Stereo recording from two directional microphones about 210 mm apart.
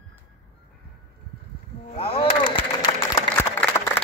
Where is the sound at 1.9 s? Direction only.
30° left (ahead or behind).